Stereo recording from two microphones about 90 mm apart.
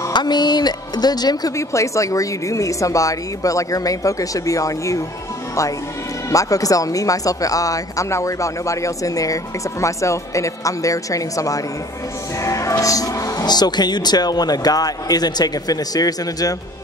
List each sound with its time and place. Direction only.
0.1 s speech: 55° left (ahead or behind)
1.6 s speech: 35° left (ahead or behind)
6.3 s speech: 40° left (ahead or behind)